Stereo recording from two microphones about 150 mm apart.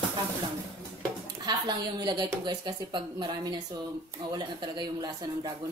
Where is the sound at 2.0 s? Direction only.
30° right (ahead or behind).